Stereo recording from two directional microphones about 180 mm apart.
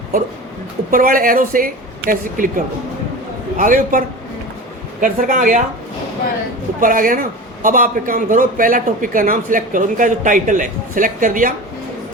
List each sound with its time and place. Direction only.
0.9 s a man's voice: 50° right (ahead or behind)
6.7 s a man's voice: 50° right (ahead or behind)